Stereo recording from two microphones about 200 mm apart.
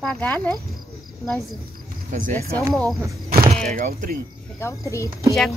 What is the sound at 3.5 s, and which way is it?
Speech, 40° right (ahead or behind).